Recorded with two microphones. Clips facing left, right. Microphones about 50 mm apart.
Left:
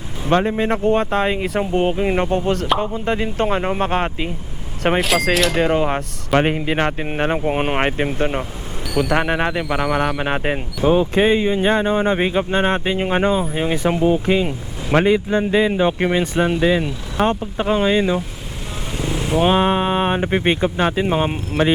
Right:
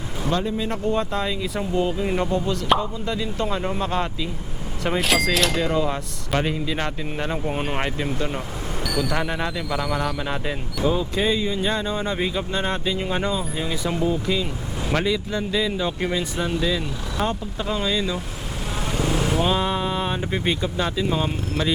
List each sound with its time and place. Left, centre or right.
0.3 s speech: left
2.0 s speech: left
4.9 s speech: centre
5.5 s speech: left
18.9 s vehicle: centre
19.4 s speech: left